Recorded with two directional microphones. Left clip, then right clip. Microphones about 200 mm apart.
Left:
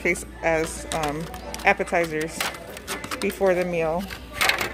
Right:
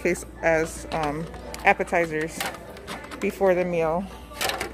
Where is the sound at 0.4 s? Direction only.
10° right (ahead or behind).